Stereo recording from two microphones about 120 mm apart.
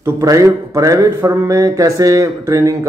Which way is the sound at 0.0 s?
30° right (ahead or behind).